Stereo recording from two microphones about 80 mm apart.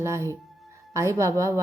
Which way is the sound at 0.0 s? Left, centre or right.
Right.